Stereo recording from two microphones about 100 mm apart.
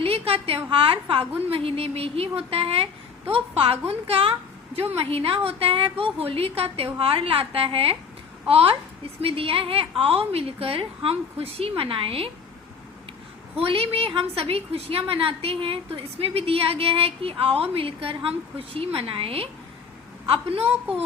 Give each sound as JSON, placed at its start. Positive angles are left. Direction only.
{"t": 0.0, "sound": "a woman's voice", "side_deg": -75}
{"t": 11.8, "sound": "a woman's voice", "side_deg": -65}
{"t": 13.6, "sound": "a woman's voice", "side_deg": -70}